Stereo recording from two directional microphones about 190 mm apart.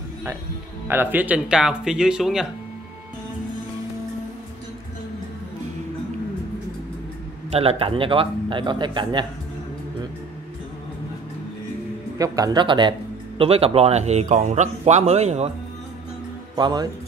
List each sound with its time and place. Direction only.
0.8 s speech: 10° right (ahead or behind)
7.5 s a man's voice: 30° right (ahead or behind)
12.2 s a man's voice: 20° right (ahead or behind); by 15.5 s 35° right (ahead or behind)
16.5 s a man's voice: 20° right (ahead or behind)